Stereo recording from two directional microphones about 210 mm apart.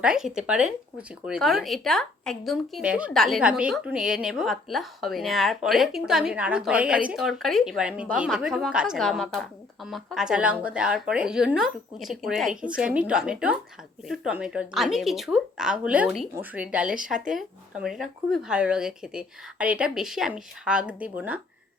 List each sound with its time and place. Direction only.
0.0 s speech: 5° right (ahead or behind)